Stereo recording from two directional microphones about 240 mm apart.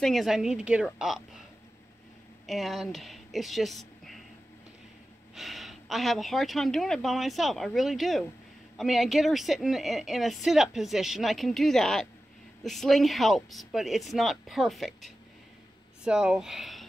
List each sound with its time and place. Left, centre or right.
0.0 s a woman's voice: centre
2.4 s speech: centre
5.3 s a woman's voice: centre